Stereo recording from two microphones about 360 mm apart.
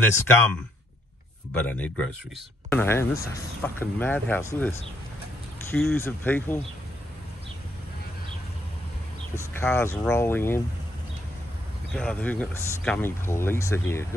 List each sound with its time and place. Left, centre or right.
0.0 s speech: centre
9.6 s speech: centre
11.9 s speech: centre